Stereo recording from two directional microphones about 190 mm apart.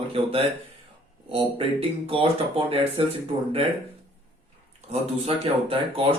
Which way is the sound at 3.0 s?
30° right (ahead or behind).